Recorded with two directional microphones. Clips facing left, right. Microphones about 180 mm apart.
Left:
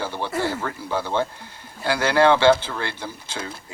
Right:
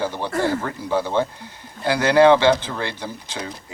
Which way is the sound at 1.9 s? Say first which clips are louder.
Right 4 dB; 15° right (ahead or behind).